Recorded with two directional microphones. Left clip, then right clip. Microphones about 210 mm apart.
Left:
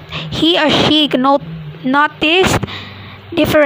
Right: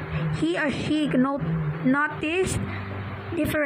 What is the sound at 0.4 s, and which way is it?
A woman's voice, 50° left (ahead or behind).